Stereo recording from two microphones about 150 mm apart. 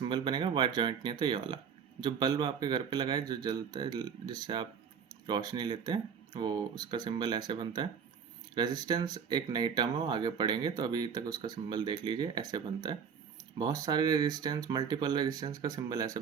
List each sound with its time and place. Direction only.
0.0 s speech: 30° right (ahead or behind)